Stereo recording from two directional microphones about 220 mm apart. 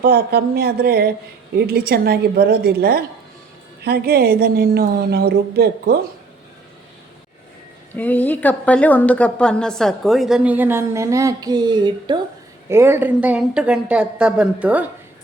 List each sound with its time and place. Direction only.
0.0 s a woman's voice: 45° right (ahead or behind)
7.9 s a woman's voice: 10° left (ahead or behind)